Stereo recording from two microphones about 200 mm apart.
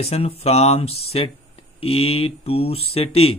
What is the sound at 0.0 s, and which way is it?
Speech, 30° left (ahead or behind).